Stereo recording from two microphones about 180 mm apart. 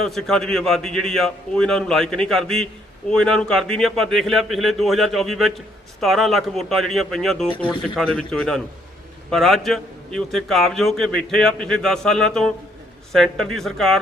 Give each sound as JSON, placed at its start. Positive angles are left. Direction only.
{"t": 0.0, "sound": "a man's voice", "side_deg": 0}
{"t": 7.5, "sound": "speech", "side_deg": 25}
{"t": 7.8, "sound": "a man's voice", "side_deg": 5}